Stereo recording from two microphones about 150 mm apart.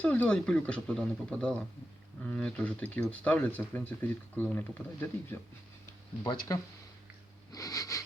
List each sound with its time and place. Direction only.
0.0 s speech: 10° left (ahead or behind)
6.5 s sniff: 20° left (ahead or behind)